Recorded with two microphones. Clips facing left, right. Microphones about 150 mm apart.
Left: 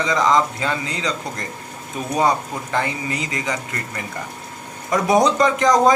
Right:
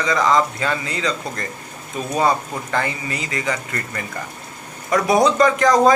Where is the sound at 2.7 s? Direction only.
15° left (ahead or behind).